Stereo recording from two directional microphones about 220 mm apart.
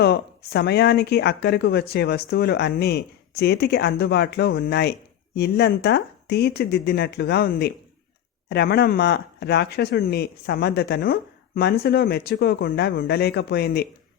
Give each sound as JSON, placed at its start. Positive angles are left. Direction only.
{"t": 0.0, "sound": "speech", "side_deg": 45}